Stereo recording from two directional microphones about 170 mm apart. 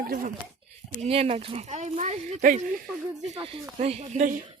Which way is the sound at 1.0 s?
35° right (ahead or behind).